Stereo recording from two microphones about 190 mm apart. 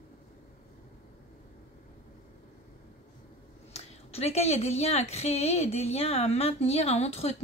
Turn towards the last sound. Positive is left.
turn(degrees=35)  # may be behind; listen again after turning